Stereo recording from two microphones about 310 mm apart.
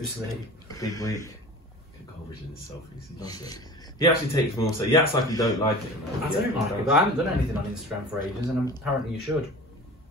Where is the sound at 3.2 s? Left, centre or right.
Centre.